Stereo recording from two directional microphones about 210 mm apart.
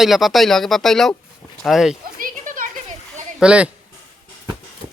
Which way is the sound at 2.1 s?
40° right (ahead or behind).